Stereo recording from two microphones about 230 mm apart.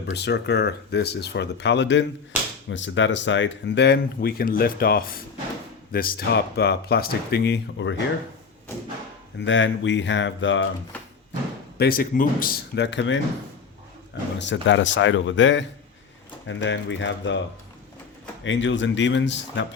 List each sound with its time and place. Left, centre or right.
0.1 s speech: left
9.4 s speech: left
11.8 s speech: left
14.3 s speech: left
18.4 s speech: left